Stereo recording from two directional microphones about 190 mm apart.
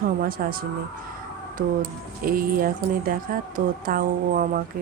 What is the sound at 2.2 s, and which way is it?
Speech, 50° right (ahead or behind).